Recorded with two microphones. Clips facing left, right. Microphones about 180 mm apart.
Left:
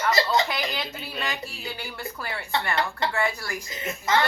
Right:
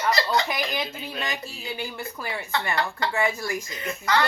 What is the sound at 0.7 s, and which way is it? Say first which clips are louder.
Speech: right 2 dB; 15° right (ahead or behind).